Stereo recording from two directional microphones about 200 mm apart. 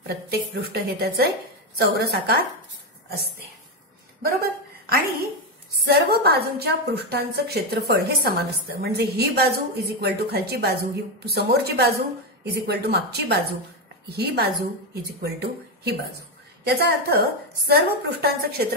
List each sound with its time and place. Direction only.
0.0 s a woman's voice: 50° right (ahead or behind)
4.2 s a woman's voice: 50° right (ahead or behind)